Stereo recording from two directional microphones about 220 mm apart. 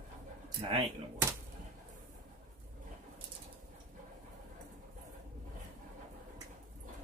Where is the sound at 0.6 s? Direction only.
25° right (ahead or behind).